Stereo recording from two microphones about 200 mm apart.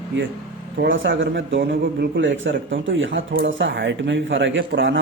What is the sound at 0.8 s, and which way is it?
A man's voice, 70° right (ahead or behind).